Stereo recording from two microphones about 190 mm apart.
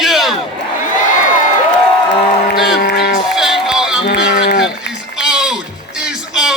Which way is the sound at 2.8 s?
55° left (ahead or behind).